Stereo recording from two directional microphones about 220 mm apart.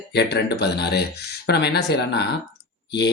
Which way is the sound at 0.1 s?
50° left (ahead or behind).